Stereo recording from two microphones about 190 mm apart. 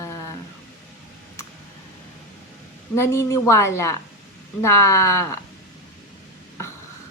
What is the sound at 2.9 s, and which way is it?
Speech, 15° left (ahead or behind).